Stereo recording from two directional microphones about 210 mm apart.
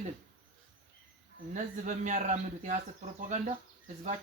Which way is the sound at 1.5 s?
35° right (ahead or behind).